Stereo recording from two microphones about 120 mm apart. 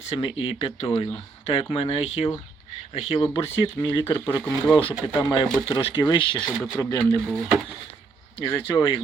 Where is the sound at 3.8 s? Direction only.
40° left (ahead or behind).